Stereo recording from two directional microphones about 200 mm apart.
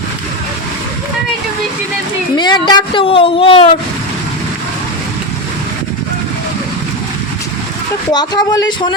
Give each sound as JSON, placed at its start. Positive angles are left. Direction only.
{"t": 2.3, "sound": "speech", "side_deg": 20}
{"t": 8.1, "sound": "speech", "side_deg": 20}